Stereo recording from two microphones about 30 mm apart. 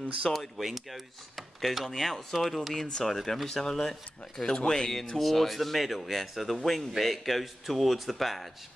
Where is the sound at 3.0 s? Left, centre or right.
Centre.